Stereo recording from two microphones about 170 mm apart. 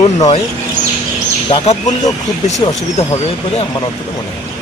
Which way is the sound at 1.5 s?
30° left (ahead or behind).